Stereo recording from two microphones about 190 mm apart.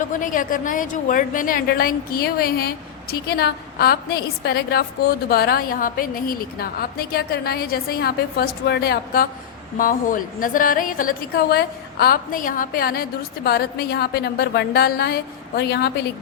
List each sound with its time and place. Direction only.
0.1 s a woman's voice: 45° left (ahead or behind); by 15.9 s 60° left (ahead or behind)